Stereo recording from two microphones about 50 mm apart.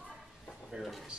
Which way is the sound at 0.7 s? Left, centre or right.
Centre.